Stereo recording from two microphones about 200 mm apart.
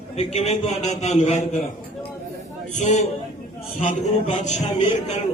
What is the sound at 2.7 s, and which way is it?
A man's voice, 35° left (ahead or behind).